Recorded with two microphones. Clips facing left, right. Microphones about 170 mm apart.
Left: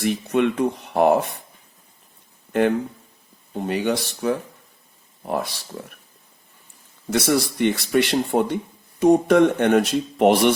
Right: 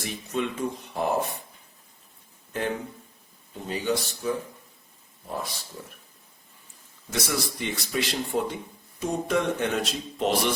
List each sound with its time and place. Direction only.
0.0 s speech: 65° left (ahead or behind)
2.5 s speech: 65° left (ahead or behind)
7.1 s speech: 65° left (ahead or behind)